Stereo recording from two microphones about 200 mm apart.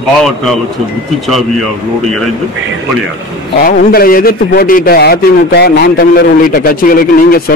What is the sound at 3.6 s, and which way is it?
A man's voice, 45° left (ahead or behind).